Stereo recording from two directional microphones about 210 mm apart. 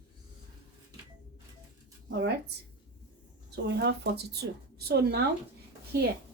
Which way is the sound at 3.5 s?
55° right (ahead or behind).